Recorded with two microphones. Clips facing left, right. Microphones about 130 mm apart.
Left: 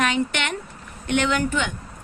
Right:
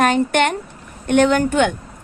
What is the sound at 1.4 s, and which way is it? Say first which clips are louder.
Speech: right 8 dB; 60° right (ahead or behind).